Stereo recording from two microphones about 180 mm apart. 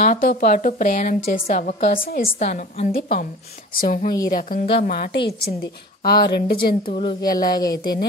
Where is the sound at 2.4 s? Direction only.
40° left (ahead or behind).